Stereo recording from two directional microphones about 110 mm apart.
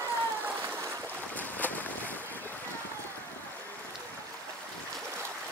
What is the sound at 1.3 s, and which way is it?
Boat, 15° left (ahead or behind).